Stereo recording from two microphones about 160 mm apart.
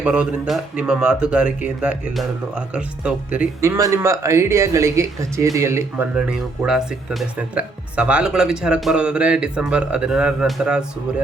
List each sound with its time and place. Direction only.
0.0 s speech: 5° right (ahead or behind)
3.8 s speech: 20° right (ahead or behind)
6.1 s speech: 5° right (ahead or behind)